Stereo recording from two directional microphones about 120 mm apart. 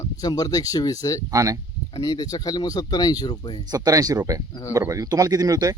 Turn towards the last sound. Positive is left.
turn(degrees=-30)  # may be behind; listen again after turning